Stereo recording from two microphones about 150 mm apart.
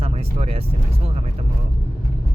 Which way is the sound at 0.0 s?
45° right (ahead or behind).